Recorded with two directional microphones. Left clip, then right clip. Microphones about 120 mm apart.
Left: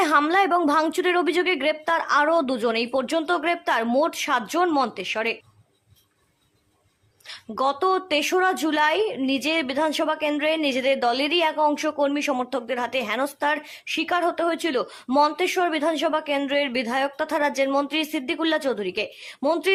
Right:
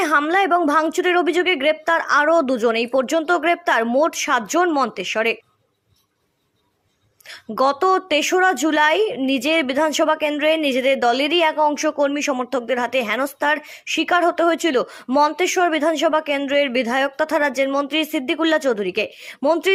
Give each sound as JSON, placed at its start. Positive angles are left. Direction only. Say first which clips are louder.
{"t": 0.3, "sound": "a woman's voice", "louder": "right 3 dB", "side_deg": -25}
{"t": 7.3, "sound": "a woman's voice", "louder": "right 5 dB", "side_deg": -40}